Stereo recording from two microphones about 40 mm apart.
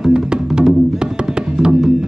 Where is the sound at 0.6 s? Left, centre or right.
Centre.